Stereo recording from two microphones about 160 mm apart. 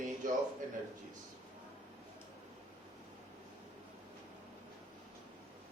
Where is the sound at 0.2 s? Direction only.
55° right (ahead or behind).